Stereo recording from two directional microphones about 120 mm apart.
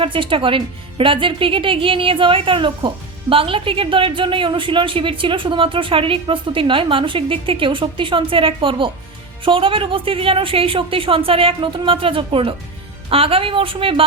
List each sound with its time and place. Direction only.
0.0 s speech: 45° right (ahead or behind)